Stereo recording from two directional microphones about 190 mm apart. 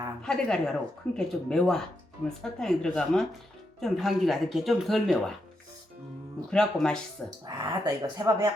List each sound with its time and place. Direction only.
0.2 s speech: 5° left (ahead or behind)
6.5 s speech: 5° left (ahead or behind)
7.4 s speech: 20° right (ahead or behind)